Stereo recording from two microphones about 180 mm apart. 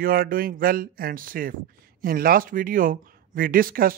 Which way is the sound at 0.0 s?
55° right (ahead or behind).